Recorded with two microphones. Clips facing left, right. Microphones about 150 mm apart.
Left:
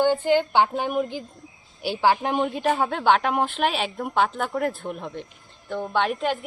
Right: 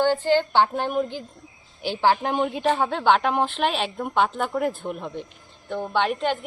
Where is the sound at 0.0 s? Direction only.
10° left (ahead or behind).